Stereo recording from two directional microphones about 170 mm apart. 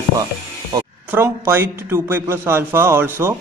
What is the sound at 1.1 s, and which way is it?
A man's voice, 15° right (ahead or behind).